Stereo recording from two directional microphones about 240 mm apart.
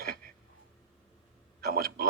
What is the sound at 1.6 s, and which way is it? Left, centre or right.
Speech, right.